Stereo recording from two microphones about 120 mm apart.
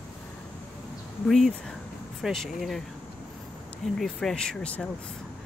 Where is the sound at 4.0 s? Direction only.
5° left (ahead or behind).